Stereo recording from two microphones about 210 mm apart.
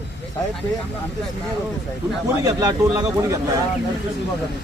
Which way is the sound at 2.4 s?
15° right (ahead or behind).